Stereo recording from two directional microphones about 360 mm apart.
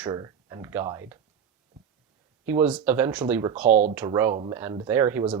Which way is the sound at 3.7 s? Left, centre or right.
Centre.